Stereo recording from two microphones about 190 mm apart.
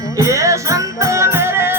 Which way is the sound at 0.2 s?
15° right (ahead or behind).